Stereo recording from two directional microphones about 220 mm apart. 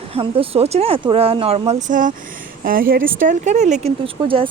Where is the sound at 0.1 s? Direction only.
25° right (ahead or behind).